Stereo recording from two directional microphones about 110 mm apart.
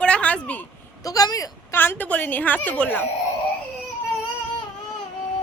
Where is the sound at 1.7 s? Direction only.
20° left (ahead or behind).